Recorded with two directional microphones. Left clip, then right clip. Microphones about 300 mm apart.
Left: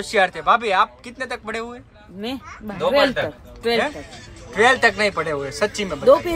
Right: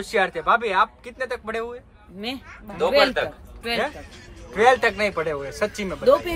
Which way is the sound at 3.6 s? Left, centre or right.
Centre.